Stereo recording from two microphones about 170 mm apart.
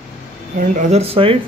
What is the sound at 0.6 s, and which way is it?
Speech, 45° right (ahead or behind).